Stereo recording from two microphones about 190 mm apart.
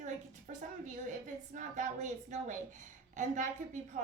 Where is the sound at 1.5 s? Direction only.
40° right (ahead or behind).